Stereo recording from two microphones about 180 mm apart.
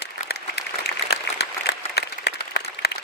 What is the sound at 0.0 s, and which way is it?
Applause, 65° left (ahead or behind).